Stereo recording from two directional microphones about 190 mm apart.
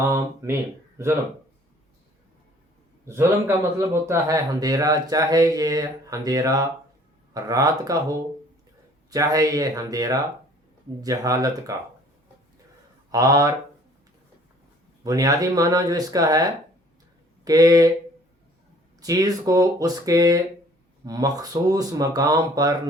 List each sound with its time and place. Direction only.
0.0 s a man's voice: 15° right (ahead or behind)
3.1 s a man's voice: 15° right (ahead or behind)
13.1 s speech: 20° right (ahead or behind)
15.0 s speech: 20° right (ahead or behind)
18.9 s speech: 20° right (ahead or behind)